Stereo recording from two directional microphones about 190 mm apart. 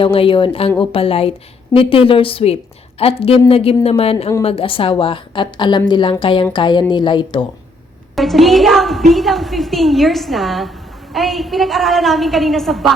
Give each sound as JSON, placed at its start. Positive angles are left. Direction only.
{"t": 0.0, "sound": "a woman's voice", "side_deg": 30}
{"t": 8.1, "sound": "a woman's voice", "side_deg": 0}